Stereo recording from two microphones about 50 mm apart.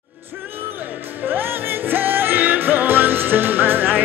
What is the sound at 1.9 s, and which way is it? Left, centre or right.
Music, right.